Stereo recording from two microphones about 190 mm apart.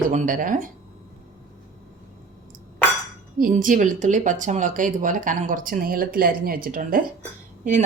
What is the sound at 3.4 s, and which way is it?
A woman's voice, 45° right (ahead or behind).